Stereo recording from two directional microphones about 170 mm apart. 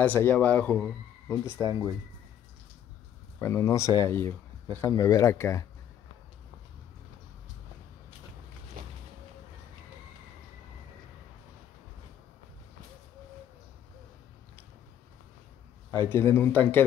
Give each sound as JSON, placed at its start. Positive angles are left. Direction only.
{"t": 0.0, "sound": "speech", "side_deg": 10}
{"t": 1.6, "sound": "speech", "side_deg": 25}
{"t": 3.3, "sound": "speech", "side_deg": 15}
{"t": 8.8, "sound": "a sound", "side_deg": -55}
{"t": 15.9, "sound": "speech", "side_deg": 15}